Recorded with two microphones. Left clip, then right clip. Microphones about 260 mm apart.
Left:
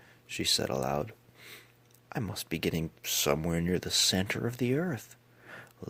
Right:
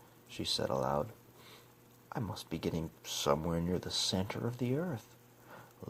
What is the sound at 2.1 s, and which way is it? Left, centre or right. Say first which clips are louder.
Speech: left 5 dB; left.